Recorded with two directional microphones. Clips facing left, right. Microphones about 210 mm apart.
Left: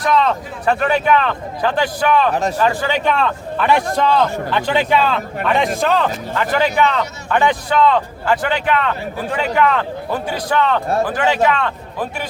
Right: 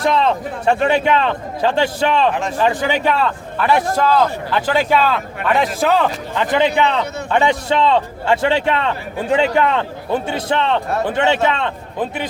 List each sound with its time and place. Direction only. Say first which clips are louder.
0.0 s a man's voice: even; 25° right (ahead or behind)
2.9 s a man's voice: even; 10° right (ahead or behind)